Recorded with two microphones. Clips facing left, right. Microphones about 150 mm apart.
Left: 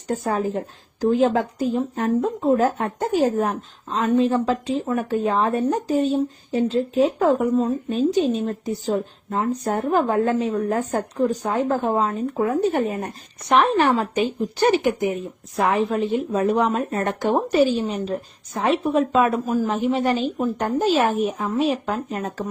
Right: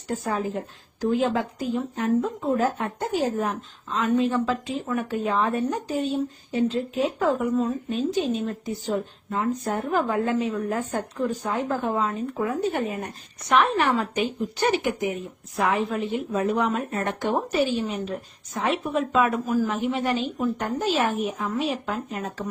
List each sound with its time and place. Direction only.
0.1 s a woman's voice: 40° left (ahead or behind)
15.5 s a woman's voice: 35° left (ahead or behind)